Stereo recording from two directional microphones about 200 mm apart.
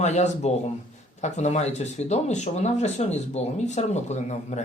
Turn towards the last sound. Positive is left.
turn(degrees=35)  # may be behind; listen again after turning